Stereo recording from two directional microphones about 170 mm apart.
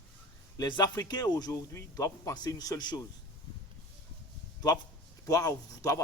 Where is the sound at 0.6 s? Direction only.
25° left (ahead or behind).